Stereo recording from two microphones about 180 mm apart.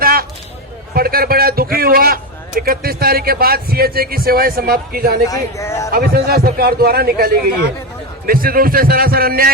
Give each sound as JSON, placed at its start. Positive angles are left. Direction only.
{"t": 0.0, "sound": "a sound", "side_deg": -55}
{"t": 2.6, "sound": "a man's voice", "side_deg": -55}
{"t": 5.3, "sound": "speech", "side_deg": 15}
{"t": 5.9, "sound": "a man's voice", "side_deg": -60}
{"t": 8.3, "sound": "a man's voice", "side_deg": -55}